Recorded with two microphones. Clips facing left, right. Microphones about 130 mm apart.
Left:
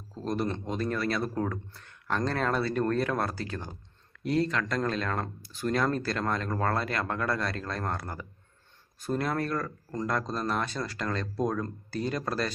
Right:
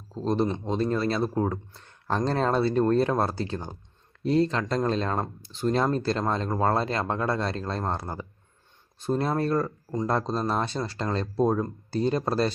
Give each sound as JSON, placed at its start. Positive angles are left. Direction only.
{"t": 0.1, "sound": "speech", "side_deg": -30}
{"t": 0.4, "sound": "a man's voice", "side_deg": -15}
{"t": 0.7, "sound": "speech", "side_deg": -25}